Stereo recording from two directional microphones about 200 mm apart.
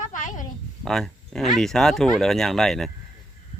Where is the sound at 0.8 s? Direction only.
Centre (ahead or behind).